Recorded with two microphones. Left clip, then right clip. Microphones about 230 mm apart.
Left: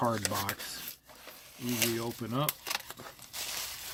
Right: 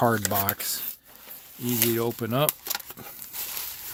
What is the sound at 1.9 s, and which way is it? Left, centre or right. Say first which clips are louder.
Speech: right 9 dB; right.